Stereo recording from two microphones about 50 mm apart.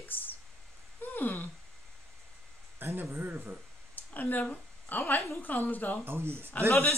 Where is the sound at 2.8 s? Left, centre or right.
Right.